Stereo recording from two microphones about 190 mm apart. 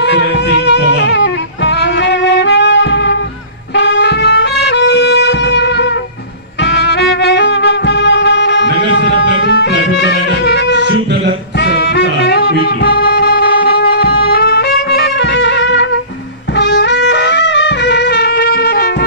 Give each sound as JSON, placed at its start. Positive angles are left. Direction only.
{"t": 0.0, "sound": "music", "side_deg": 65}